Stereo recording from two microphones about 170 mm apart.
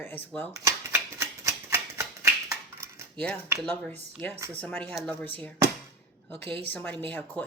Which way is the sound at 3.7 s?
10° left (ahead or behind).